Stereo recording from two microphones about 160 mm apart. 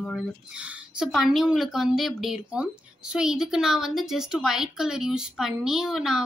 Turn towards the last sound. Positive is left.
turn(degrees=0)  # may be behind; listen again after turning